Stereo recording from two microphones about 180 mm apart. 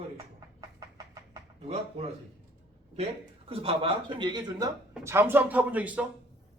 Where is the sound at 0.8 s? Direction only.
20° right (ahead or behind).